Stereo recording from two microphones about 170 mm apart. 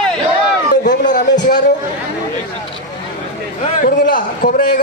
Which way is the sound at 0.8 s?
50° left (ahead or behind).